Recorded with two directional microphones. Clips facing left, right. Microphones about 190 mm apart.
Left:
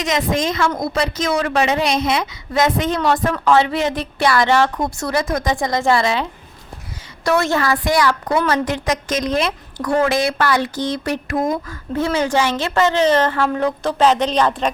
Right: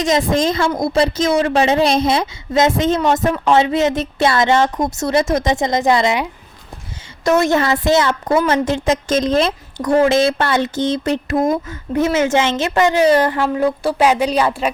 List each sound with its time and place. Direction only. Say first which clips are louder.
0.0 s a woman's voice: right 4 dB; 30° right (ahead or behind)
7.3 s a woman's voice: right 3 dB; 20° right (ahead or behind)